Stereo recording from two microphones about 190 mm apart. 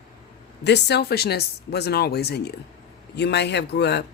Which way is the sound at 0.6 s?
65° left (ahead or behind).